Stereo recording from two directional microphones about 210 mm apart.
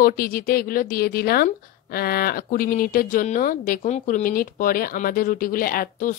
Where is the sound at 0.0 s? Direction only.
45° left (ahead or behind).